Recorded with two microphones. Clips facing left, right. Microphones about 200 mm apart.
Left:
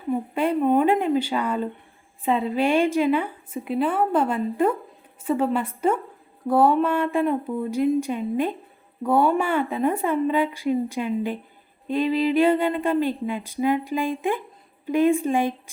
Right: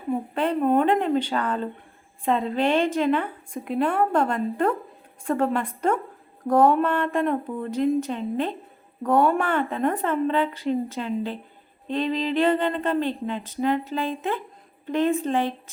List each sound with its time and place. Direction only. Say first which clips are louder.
0.1 s speech: left 1 dB; 5° left (ahead or behind)